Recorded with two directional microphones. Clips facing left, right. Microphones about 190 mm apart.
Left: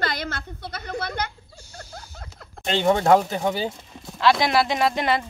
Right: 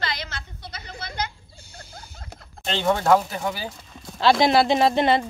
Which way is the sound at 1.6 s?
55° right (ahead or behind).